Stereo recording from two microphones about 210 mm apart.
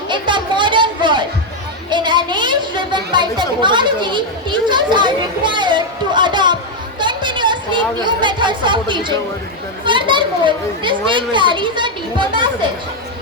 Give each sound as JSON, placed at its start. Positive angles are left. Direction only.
{"t": 0.1, "sound": "a sound", "side_deg": -20}
{"t": 7.0, "sound": "chatter", "side_deg": -20}
{"t": 9.8, "sound": "a child's voice", "side_deg": -20}